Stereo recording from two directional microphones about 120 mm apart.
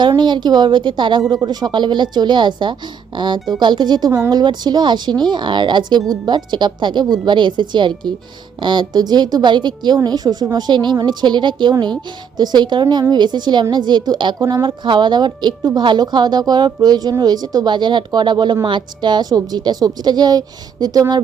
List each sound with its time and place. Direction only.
0.2 s a woman's voice: 40° right (ahead or behind)
14.3 s speech: 25° right (ahead or behind)
14.6 s a woman's voice: 40° right (ahead or behind)